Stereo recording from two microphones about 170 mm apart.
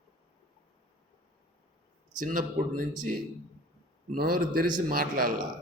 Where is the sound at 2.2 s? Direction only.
55° right (ahead or behind).